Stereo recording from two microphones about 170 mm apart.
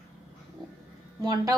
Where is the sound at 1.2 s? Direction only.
20° right (ahead or behind).